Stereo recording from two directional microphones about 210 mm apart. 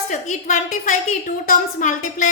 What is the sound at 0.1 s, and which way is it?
A woman's voice, 35° left (ahead or behind).